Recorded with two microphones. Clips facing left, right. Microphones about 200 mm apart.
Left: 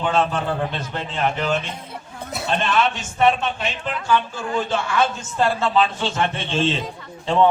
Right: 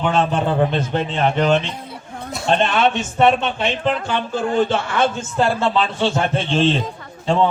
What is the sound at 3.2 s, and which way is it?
A man's voice, 60° right (ahead or behind).